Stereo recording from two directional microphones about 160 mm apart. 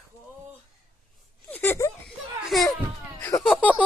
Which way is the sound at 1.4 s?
10° left (ahead or behind).